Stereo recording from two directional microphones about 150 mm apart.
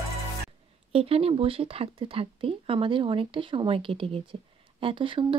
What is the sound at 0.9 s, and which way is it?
Speech, 40° right (ahead or behind).